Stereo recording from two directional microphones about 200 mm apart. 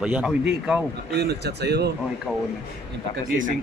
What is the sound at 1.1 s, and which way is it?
Speech, 55° right (ahead or behind).